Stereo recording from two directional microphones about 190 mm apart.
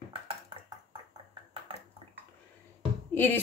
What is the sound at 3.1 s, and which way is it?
Speech, 10° left (ahead or behind).